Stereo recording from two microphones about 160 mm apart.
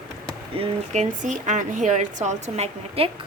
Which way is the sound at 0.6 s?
50° right (ahead or behind).